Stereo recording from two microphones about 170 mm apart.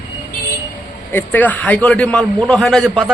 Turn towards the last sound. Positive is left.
turn(degrees=5)  # may be behind; listen again after turning